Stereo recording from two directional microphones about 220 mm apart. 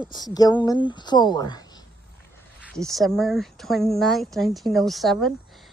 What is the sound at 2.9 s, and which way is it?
Speech, centre (ahead or behind).